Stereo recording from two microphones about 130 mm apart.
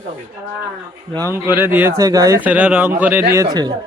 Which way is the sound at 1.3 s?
15° right (ahead or behind).